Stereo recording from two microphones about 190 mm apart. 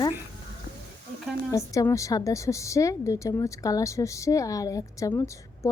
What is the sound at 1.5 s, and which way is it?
A woman's voice, 15° left (ahead or behind).